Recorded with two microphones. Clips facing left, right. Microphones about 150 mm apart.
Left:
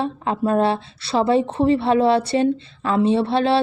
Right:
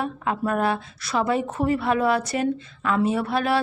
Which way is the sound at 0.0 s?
30° left (ahead or behind).